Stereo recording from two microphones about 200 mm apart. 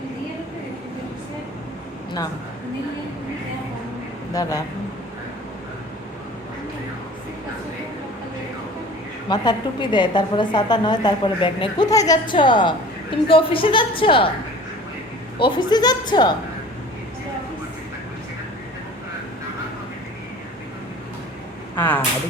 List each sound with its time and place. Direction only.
4.4 s speech: 20° left (ahead or behind)
9.3 s a woman's voice: 20° left (ahead or behind)
15.4 s a woman's voice: 25° left (ahead or behind)
21.8 s speech: 10° left (ahead or behind)